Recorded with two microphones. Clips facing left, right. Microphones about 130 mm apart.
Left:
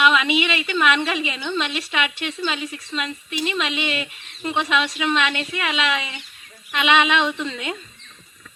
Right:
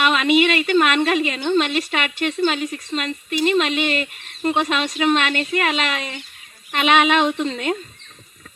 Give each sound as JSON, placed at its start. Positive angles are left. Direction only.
{"t": 0.0, "sound": "a woman's voice", "side_deg": -50}